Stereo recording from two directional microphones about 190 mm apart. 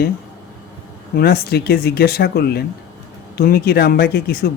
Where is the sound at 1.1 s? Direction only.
55° left (ahead or behind).